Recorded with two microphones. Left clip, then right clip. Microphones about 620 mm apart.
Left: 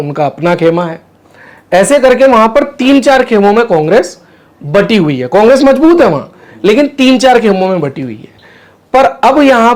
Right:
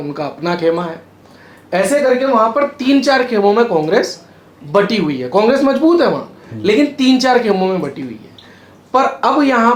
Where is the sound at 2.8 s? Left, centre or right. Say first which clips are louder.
Left 6 dB; left.